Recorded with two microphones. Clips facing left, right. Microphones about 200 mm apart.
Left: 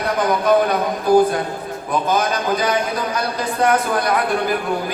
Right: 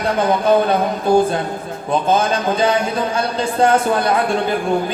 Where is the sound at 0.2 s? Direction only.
25° right (ahead or behind).